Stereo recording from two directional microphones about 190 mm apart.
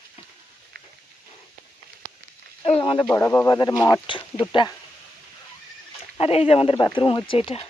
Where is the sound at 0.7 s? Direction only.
55° right (ahead or behind).